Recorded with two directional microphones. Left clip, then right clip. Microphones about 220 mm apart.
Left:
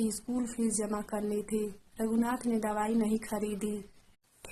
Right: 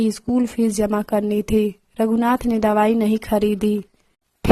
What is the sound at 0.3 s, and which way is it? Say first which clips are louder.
Speech: right 14 dB; 35° right (ahead or behind).